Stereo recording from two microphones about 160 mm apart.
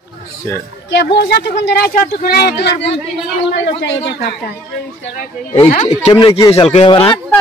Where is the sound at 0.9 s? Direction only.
90° left.